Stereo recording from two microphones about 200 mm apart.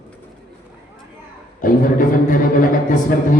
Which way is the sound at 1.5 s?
45° left (ahead or behind).